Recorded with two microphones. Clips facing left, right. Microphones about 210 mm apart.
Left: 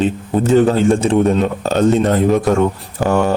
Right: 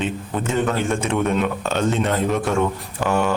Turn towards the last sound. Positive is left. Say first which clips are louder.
# left 5 dB
turn(degrees=40)  # may be behind; listen again after turning